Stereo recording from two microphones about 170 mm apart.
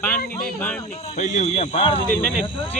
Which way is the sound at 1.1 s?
45° left (ahead or behind).